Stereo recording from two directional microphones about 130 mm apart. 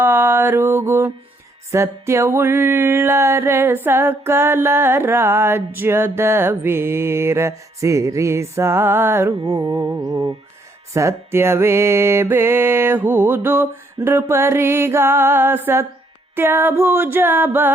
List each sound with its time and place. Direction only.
0.0 s mantra: 15° right (ahead or behind)
1.7 s music: 20° right (ahead or behind)